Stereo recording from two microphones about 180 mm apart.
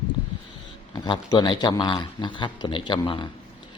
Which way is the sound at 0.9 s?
25° left (ahead or behind).